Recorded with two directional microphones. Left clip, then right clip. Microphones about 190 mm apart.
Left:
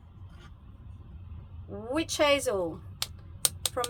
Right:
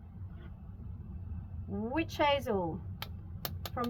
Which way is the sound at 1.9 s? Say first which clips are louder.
Left 5 dB; 25° left (ahead or behind).